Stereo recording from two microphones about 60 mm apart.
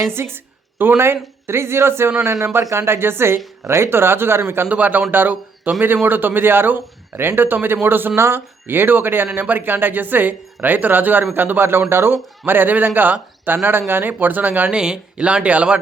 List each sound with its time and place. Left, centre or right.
0.1 s a woman's voice: right
4.7 s speech: right
14.7 s speech: centre